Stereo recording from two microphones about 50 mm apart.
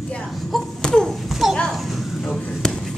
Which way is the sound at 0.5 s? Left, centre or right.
Centre.